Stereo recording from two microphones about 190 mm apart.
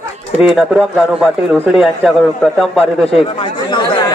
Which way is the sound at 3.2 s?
25° left (ahead or behind).